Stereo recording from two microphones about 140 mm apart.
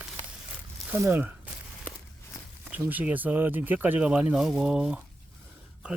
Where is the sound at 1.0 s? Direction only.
15° right (ahead or behind).